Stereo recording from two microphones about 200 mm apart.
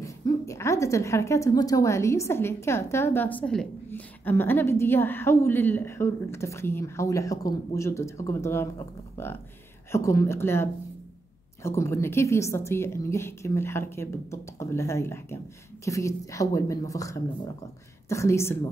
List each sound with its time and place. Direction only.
0.0 s a woman's voice: 15° left (ahead or behind)